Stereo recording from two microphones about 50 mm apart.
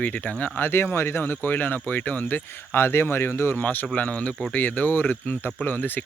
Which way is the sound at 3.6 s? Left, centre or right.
Left.